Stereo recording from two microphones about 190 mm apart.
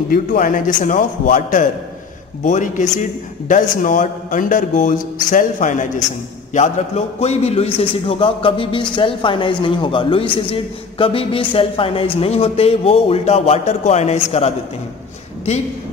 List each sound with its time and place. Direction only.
0.1 s a man's voice: 45° left (ahead or behind)
7.2 s a man's voice: 35° left (ahead or behind)